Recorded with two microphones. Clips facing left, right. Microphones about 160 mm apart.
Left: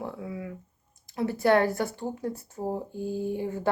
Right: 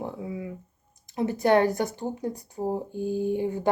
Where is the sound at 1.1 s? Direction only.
20° right (ahead or behind).